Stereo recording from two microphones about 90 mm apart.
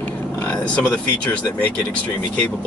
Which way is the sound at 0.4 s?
15° left (ahead or behind).